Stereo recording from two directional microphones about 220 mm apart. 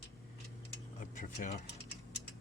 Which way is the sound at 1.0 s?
35° left (ahead or behind).